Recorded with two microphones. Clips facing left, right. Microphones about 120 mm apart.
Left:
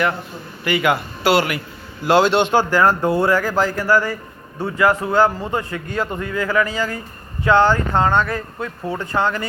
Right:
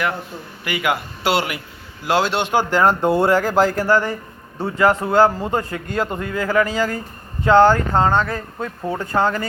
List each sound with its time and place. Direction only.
0.6 s speech: 10° right (ahead or behind)
1.2 s speech: 20° right (ahead or behind)
2.0 s speech: 5° right (ahead or behind); by 5.0 s 30° right (ahead or behind)
5.5 s speech: 40° right (ahead or behind)
9.0 s speech: 45° right (ahead or behind)